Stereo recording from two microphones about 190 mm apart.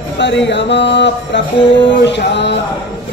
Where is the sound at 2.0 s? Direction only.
65° left (ahead or behind).